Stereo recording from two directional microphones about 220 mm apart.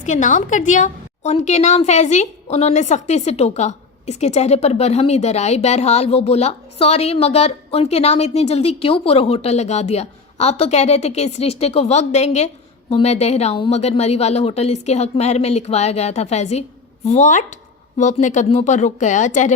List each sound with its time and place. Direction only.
0.0 s a woman's voice: 35° left (ahead or behind)